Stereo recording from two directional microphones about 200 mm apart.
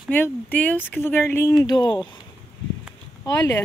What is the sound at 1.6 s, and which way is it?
Speech, 25° left (ahead or behind).